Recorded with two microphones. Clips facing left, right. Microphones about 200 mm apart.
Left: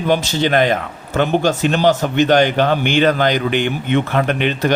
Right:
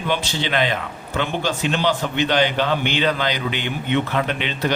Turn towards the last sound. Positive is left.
turn(degrees=50)  # may be behind; listen again after turning